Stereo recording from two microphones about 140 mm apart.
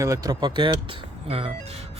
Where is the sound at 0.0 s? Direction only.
25° right (ahead or behind).